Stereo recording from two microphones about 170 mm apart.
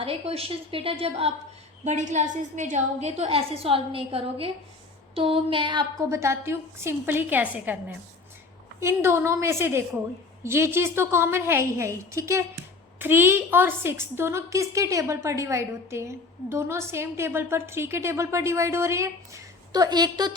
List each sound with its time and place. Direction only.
0.0 s a woman's voice: 35° right (ahead or behind)